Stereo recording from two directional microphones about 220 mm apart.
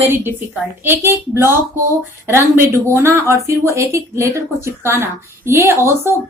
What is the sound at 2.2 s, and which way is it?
Speech, 10° right (ahead or behind).